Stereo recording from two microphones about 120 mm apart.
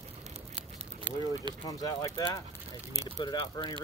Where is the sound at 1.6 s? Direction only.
30° left (ahead or behind).